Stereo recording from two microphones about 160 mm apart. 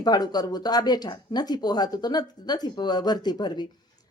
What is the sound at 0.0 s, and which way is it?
Speech, 25° left (ahead or behind).